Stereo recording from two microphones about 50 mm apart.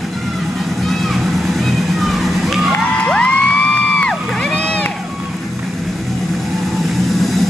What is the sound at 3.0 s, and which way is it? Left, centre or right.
Crowd, left.